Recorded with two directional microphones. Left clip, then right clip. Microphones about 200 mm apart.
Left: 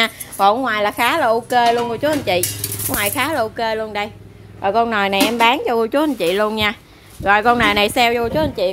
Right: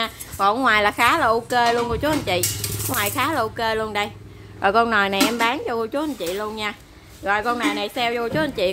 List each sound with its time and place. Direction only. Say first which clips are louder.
0.0 s a woman's voice: left 6 dB; 10° left (ahead or behind)
0.6 s speech: even; centre (ahead or behind)
4.6 s speech: left 1 dB; 10° right (ahead or behind)
4.8 s speech: left 2 dB; 5° left (ahead or behind); by 8.2 s 25° left (ahead or behind)
8.2 s speech: left 4 dB; 5° left (ahead or behind)